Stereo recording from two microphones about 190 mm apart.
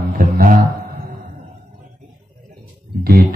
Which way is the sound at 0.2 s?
50° right (ahead or behind).